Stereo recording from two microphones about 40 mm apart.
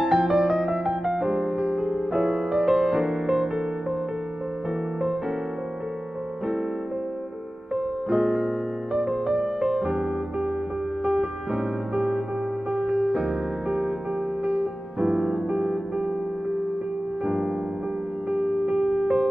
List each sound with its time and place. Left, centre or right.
0.0 s music: centre
1.6 s music: right
7.7 s music: centre
9.8 s music: centre
11.5 s music: centre
14.4 s music: right
15.0 s music: centre
18.6 s music: centre